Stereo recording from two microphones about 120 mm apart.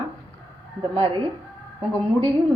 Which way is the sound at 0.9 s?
50° right (ahead or behind).